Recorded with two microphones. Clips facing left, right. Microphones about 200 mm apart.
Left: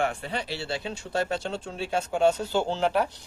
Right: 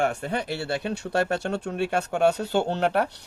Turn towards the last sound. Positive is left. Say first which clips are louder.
# right 1 dB
turn(degrees=-60)  # may be behind; listen again after turning